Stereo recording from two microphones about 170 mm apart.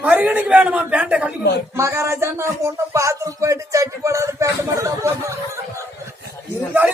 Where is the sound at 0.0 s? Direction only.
10° right (ahead or behind).